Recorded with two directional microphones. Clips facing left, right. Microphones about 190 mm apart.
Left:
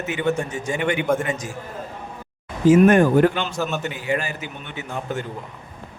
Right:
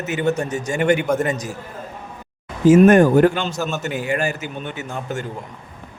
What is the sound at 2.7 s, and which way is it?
Speech, 45° right (ahead or behind).